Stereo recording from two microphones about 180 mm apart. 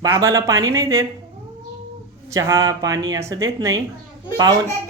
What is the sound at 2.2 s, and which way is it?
Speech, 15° right (ahead or behind).